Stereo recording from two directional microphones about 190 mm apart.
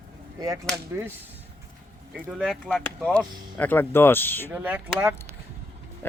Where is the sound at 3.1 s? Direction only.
10° left (ahead or behind).